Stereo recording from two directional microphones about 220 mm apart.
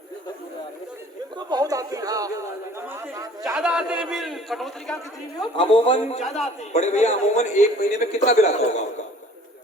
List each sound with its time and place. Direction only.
1.4 s a sound: 20° right (ahead or behind)
3.4 s a man's voice: 5° right (ahead or behind)
5.5 s a man's voice: 25° left (ahead or behind)